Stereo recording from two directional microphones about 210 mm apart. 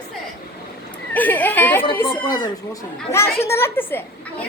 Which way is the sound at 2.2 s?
20° left (ahead or behind).